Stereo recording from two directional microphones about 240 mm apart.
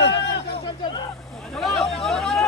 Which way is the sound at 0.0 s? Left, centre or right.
Left.